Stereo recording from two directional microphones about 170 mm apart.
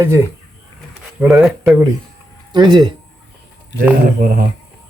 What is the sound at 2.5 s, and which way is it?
Speech, 25° right (ahead or behind).